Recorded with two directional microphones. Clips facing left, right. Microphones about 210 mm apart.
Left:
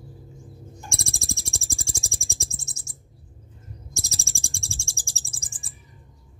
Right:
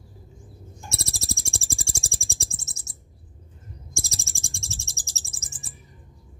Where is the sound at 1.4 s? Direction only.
30° right (ahead or behind).